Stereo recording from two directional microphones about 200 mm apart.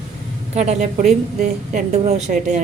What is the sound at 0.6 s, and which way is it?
Speech, 35° right (ahead or behind).